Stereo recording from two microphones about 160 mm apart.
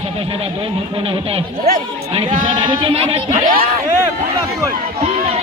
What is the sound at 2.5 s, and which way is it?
Speech, 30° right (ahead or behind).